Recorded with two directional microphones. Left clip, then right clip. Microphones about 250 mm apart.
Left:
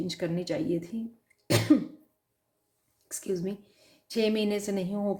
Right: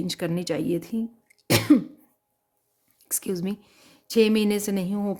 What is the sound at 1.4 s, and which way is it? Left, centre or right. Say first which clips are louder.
Cough: right 4 dB; right.